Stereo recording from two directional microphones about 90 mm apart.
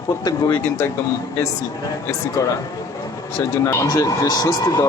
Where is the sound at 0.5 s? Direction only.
25° left (ahead or behind).